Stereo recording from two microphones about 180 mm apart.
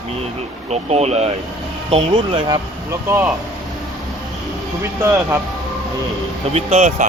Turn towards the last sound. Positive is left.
turn(degrees=-40)  # may be behind; listen again after turning